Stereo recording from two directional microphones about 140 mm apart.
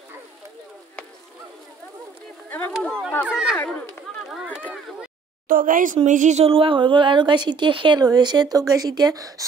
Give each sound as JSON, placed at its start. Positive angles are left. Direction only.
{"t": 2.5, "sound": "speech", "side_deg": 10}
{"t": 3.3, "sound": "speech", "side_deg": -5}
{"t": 5.5, "sound": "speech", "side_deg": -80}
{"t": 6.0, "sound": "a woman's voice", "side_deg": -60}